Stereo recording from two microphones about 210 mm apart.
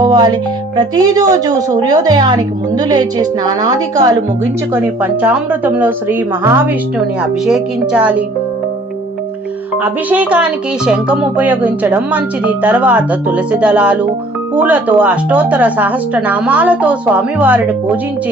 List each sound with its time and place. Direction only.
0.0 s music: 20° right (ahead or behind)
0.8 s a woman's voice: 20° right (ahead or behind)
9.8 s speech: 5° right (ahead or behind)